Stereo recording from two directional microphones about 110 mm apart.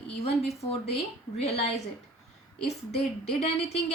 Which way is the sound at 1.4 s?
75° left (ahead or behind).